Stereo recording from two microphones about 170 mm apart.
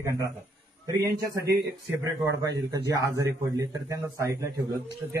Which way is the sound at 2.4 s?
20° right (ahead or behind).